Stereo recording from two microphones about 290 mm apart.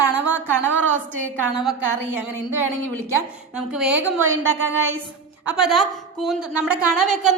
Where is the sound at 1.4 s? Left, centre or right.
Centre.